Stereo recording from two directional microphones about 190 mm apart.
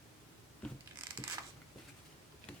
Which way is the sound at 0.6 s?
5° left (ahead or behind).